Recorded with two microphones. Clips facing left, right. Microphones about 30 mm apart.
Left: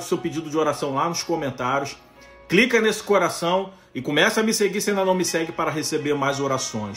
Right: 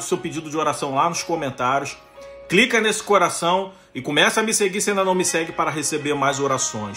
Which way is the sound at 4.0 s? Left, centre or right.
Left.